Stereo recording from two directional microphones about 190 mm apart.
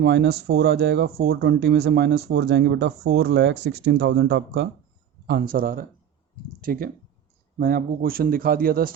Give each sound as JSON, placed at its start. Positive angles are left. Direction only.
{"t": 0.0, "sound": "speech", "side_deg": -65}
{"t": 5.2, "sound": "speech", "side_deg": -50}